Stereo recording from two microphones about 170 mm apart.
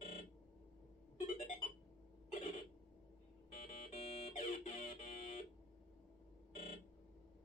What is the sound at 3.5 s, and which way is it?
Music, 45° left (ahead or behind).